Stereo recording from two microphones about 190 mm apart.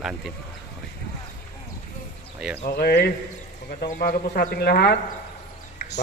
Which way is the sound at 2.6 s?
55° left (ahead or behind).